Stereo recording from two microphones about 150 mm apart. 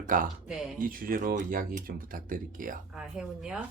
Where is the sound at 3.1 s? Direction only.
5° right (ahead or behind).